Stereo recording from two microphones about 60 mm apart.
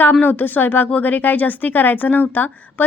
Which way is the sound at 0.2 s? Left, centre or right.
Left.